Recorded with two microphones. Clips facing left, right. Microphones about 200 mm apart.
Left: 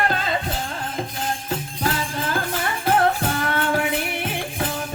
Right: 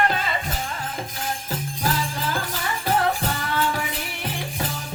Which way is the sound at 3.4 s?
60° left (ahead or behind).